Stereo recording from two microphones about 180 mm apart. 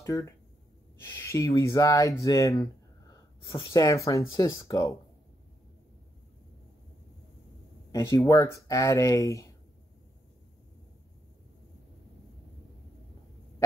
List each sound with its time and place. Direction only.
0.0 s speech: 15° left (ahead or behind)
7.9 s speech: 15° left (ahead or behind)